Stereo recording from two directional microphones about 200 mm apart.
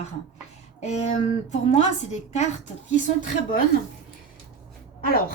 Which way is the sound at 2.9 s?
40° left (ahead or behind).